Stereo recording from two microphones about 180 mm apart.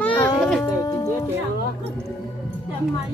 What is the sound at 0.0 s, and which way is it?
Music, 5° left (ahead or behind).